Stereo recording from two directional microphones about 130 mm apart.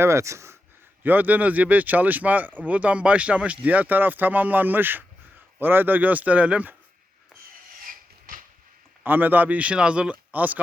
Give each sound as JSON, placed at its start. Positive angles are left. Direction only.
{"t": 0.0, "sound": "speech", "side_deg": -20}
{"t": 9.0, "sound": "speech", "side_deg": -15}